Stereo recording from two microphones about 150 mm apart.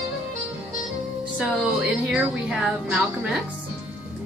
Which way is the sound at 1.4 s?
5° right (ahead or behind).